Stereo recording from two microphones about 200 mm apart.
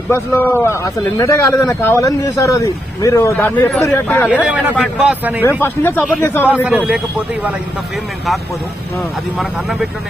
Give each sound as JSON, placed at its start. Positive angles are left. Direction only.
{"t": 0.1, "sound": "speech", "side_deg": 10}
{"t": 4.7, "sound": "a man's voice", "side_deg": 0}
{"t": 5.4, "sound": "speech", "side_deg": 10}
{"t": 6.5, "sound": "a man's voice", "side_deg": -5}